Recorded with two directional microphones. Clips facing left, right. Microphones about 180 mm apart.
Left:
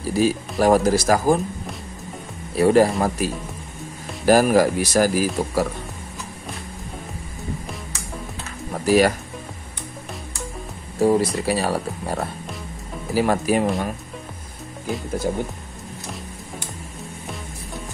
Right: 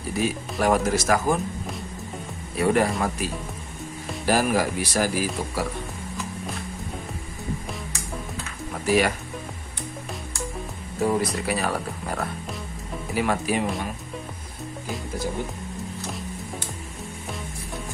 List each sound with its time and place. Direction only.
0.1 s speech: 35° left (ahead or behind)
2.5 s speech: 35° left (ahead or behind)
4.3 s speech: 40° left (ahead or behind)
8.7 s speech: 40° left (ahead or behind)
11.0 s speech: 30° left (ahead or behind)